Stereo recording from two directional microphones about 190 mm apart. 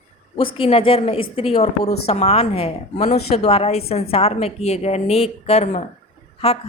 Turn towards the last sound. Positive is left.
turn(degrees=30)  # may be behind; listen again after turning